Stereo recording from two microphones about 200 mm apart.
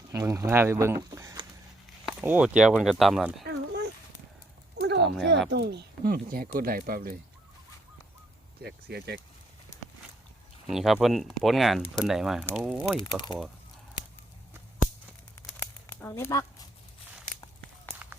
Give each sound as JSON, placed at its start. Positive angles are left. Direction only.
{"t": 0.1, "sound": "speech", "side_deg": -15}
{"t": 3.4, "sound": "a sound", "side_deg": -55}
{"t": 5.5, "sound": "speech", "side_deg": -55}
{"t": 8.6, "sound": "speech", "side_deg": -55}
{"t": 10.7, "sound": "speech", "side_deg": 0}
{"t": 13.0, "sound": "speech", "side_deg": 20}
{"t": 15.5, "sound": "a sound", "side_deg": 10}